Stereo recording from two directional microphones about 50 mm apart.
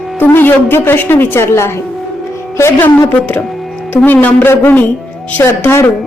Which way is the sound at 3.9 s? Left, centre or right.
Left.